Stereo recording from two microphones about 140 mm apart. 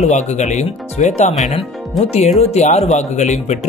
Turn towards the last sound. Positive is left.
turn(degrees=55)  # may be behind; listen again after turning